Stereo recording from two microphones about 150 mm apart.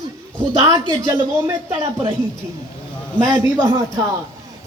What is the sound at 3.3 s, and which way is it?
Speech, 20° right (ahead or behind).